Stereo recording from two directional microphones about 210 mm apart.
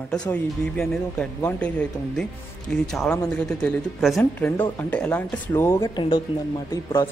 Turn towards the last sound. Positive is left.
turn(degrees=20)  # may be behind; listen again after turning